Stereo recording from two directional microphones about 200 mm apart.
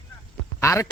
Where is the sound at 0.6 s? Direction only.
15° left (ahead or behind).